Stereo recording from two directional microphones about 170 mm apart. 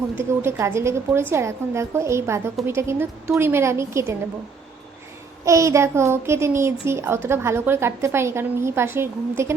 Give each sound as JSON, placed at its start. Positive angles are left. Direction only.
{"t": 0.2, "sound": "a child's voice", "side_deg": -15}
{"t": 5.5, "sound": "a child's voice", "side_deg": -15}